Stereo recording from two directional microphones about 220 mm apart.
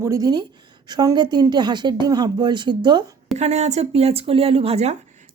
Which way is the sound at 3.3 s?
30° right (ahead or behind).